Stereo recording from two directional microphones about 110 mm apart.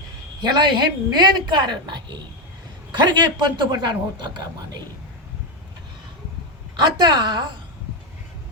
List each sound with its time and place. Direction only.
0.4 s a man's voice: 40° right (ahead or behind)
6.7 s a man's voice: 40° right (ahead or behind)